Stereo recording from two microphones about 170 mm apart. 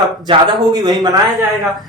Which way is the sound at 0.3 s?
20° right (ahead or behind).